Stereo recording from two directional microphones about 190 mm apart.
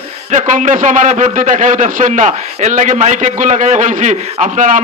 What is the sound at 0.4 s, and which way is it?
A man's voice, 40° right (ahead or behind).